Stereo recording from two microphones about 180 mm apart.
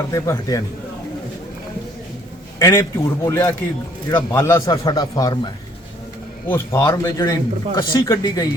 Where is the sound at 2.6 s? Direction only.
15° left (ahead or behind).